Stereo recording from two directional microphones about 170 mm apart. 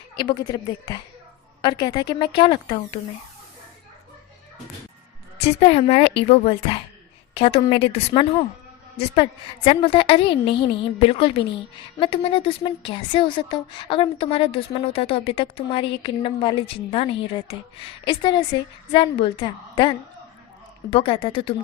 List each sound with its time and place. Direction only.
0.2 s a woman's voice: 25° left (ahead or behind)
5.4 s a woman's voice: 35° left (ahead or behind)
9.6 s a woman's voice: 30° left (ahead or behind)